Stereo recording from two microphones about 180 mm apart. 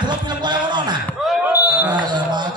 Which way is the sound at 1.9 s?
25° right (ahead or behind).